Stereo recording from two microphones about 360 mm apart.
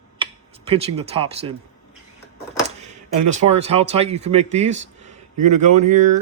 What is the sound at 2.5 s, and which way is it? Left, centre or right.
Speech, centre.